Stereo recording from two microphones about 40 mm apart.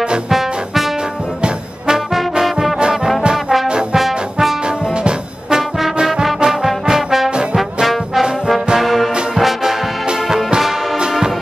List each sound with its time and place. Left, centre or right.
2.9 s music: centre
3.9 s brass instrument: centre
6.4 s trombone: centre
7.5 s brass instrument: centre
10.2 s music: centre